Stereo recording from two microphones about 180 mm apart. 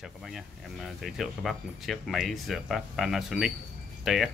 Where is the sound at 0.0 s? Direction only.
Centre (ahead or behind).